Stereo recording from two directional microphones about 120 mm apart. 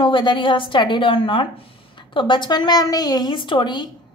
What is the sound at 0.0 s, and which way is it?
A woman's voice, 40° left (ahead or behind).